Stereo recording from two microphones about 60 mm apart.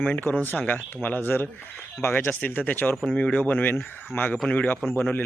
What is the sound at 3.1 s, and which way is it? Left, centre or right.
Speech, centre.